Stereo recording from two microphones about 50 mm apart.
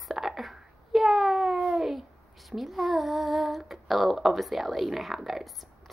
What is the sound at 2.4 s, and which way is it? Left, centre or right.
Speech, centre.